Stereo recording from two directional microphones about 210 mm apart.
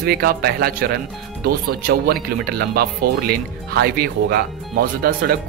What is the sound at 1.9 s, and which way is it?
Speech, 45° right (ahead or behind).